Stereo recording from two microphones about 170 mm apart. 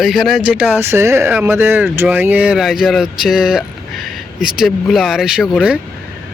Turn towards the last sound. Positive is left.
turn(degrees=-5)  # may be behind; listen again after turning